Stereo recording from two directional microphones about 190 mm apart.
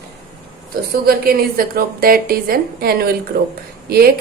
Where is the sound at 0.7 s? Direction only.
55° right (ahead or behind).